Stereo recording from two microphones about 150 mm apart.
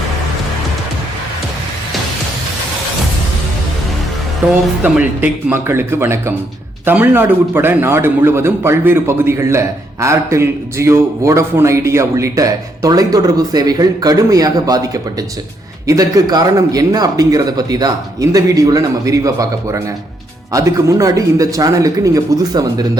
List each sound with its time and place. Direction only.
4.4 s a man's voice: 15° right (ahead or behind)